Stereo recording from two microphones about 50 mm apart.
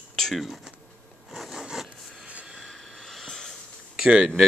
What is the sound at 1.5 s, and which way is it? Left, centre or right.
Rub, centre.